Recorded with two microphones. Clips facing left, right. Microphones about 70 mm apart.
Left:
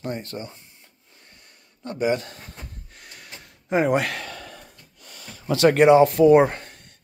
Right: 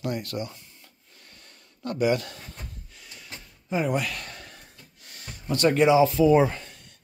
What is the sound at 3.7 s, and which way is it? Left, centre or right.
Speech, left.